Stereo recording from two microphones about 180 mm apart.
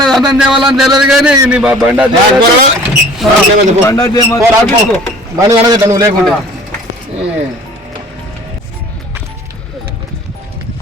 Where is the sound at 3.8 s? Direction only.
20° left (ahead or behind).